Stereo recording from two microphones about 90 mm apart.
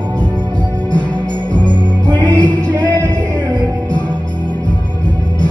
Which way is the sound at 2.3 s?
15° left (ahead or behind).